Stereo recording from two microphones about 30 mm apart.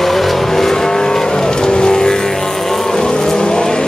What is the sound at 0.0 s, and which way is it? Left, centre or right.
Vehicle, centre.